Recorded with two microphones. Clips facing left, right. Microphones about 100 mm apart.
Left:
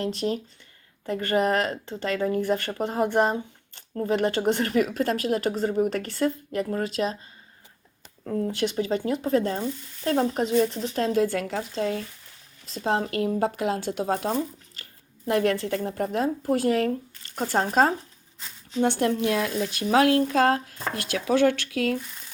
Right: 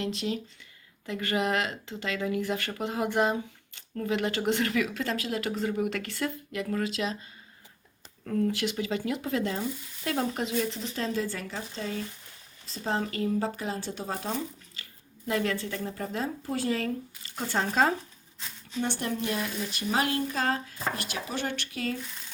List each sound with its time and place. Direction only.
0.0 s speech: 40° left (ahead or behind)
8.2 s speech: 20° left (ahead or behind); by 10.7 s 40° left (ahead or behind)
10.9 s speech: 55° left (ahead or behind)
15.3 s speech: 55° left (ahead or behind)
17.3 s speech: 45° left (ahead or behind)
18.8 s speech: 90° left; by 20.7 s 65° left (ahead or behind)
21.2 s speech: 90° left